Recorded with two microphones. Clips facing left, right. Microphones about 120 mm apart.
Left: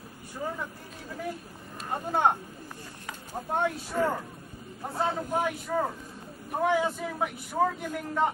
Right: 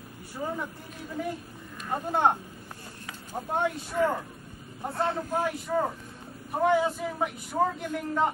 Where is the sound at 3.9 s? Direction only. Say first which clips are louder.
Right 2 dB; 45° left (ahead or behind).